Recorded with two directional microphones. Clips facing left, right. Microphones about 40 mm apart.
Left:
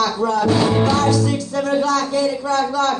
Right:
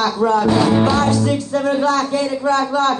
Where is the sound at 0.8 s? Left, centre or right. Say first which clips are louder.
Right 1 dB; right.